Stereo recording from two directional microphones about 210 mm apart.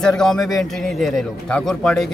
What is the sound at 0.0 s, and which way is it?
Speech, 5° left (ahead or behind).